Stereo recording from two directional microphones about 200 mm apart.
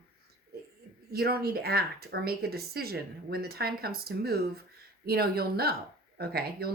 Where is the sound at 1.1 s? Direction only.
50° right (ahead or behind).